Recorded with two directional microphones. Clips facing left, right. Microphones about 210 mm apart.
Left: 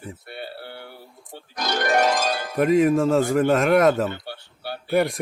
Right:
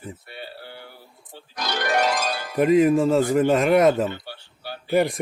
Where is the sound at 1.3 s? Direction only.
45° left (ahead or behind).